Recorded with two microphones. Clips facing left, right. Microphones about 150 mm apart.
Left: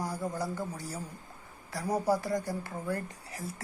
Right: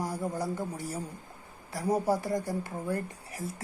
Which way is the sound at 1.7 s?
10° right (ahead or behind).